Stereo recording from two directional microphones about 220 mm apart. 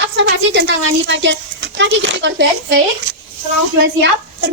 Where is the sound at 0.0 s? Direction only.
55° right (ahead or behind).